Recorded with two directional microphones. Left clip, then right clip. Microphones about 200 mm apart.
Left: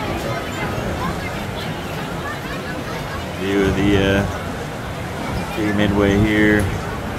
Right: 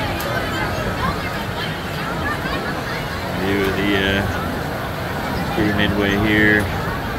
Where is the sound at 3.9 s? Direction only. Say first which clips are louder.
Left 2 dB; 25° left (ahead or behind).